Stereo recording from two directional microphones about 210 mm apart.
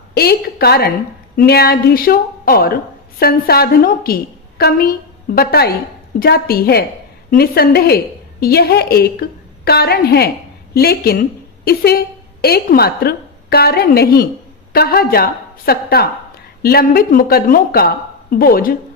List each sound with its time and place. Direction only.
0.1 s a woman's voice: 50° left (ahead or behind)